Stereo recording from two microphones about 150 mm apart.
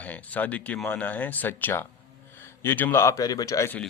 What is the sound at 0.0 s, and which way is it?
Speech, 10° left (ahead or behind).